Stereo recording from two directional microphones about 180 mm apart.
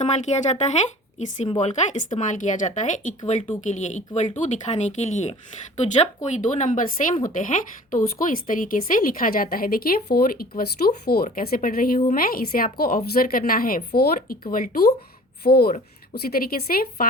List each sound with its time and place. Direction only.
0.0 s a woman's voice: 40° left (ahead or behind)
6.3 s a woman's voice: 45° left (ahead or behind)
15.4 s speech: 60° left (ahead or behind)